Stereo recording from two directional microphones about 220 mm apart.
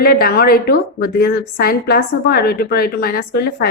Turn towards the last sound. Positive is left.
turn(degrees=45)  # may be behind; listen again after turning